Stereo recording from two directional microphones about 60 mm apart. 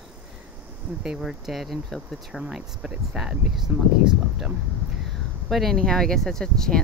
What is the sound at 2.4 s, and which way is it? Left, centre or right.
Speech, centre.